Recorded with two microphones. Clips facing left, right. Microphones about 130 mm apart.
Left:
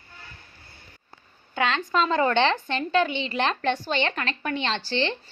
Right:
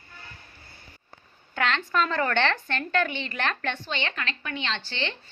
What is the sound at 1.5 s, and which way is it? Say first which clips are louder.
A woman's voice: left 2 dB; 10° left (ahead or behind).